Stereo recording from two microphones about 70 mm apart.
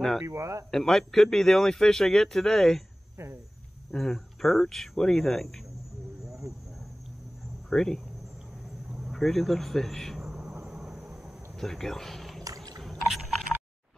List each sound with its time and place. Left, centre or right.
0.3 s speech: right
0.7 s a man's voice: centre
3.2 s speech: right
3.9 s a man's voice: centre
7.7 s speech: centre
9.0 s speech: centre
10.2 s a sound: centre
10.5 s thunder: centre
11.5 s speech: centre
12.4 s a sound: right
12.8 s a sound: centre